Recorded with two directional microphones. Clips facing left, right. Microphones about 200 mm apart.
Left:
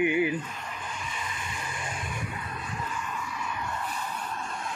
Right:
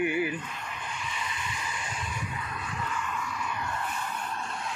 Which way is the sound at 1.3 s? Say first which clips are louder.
Even; 50° left (ahead or behind).